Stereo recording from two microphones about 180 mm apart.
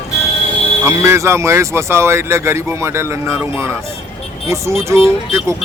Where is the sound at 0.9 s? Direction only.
15° right (ahead or behind).